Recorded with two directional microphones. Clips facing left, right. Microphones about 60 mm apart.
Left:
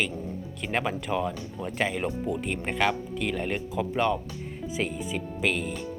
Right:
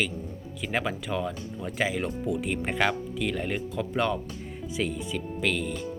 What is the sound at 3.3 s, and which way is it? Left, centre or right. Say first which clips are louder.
Speech: left 2 dB; centre.